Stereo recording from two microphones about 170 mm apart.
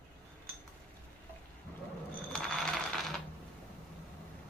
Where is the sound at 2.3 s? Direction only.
Centre (ahead or behind).